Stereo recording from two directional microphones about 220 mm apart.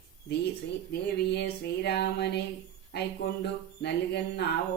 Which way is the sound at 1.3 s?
50° left (ahead or behind).